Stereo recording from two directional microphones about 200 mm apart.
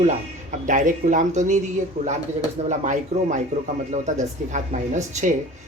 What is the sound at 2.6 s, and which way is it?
Speech, 35° right (ahead or behind).